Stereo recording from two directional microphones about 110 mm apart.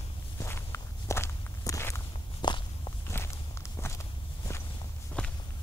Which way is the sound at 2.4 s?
45° left (ahead or behind).